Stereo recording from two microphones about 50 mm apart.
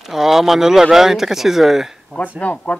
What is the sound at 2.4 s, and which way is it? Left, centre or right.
Speech, left.